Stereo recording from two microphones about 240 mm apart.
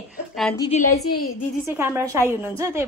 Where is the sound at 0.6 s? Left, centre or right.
Left.